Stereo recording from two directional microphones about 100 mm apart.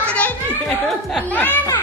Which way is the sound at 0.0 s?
10° left (ahead or behind).